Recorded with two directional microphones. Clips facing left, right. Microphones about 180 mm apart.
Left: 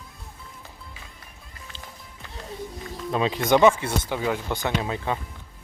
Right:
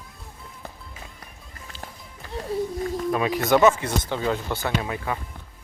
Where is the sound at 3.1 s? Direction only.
25° left (ahead or behind).